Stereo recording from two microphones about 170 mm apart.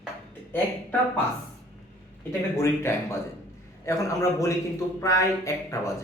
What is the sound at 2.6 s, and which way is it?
A man's voice, 15° left (ahead or behind).